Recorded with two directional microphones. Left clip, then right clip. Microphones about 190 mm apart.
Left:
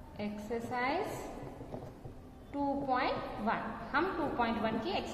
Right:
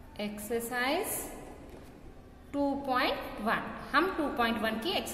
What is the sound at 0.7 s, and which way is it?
Speech, 35° right (ahead or behind).